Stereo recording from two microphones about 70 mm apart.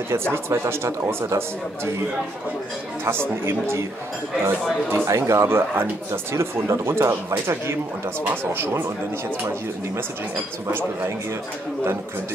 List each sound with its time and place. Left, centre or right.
0.5 s speech: right
3.1 s speech: right
4.9 s speech: right
10.7 s speech: right